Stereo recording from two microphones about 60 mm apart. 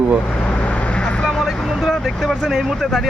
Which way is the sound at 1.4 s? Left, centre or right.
Centre.